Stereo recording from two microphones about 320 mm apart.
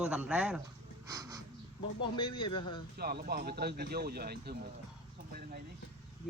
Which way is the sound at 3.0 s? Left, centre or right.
Right.